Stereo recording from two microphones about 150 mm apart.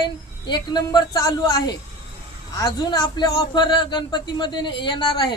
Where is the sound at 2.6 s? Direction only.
25° left (ahead or behind).